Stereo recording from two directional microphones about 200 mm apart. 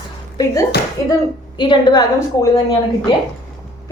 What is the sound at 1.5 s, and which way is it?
Speech, 25° left (ahead or behind).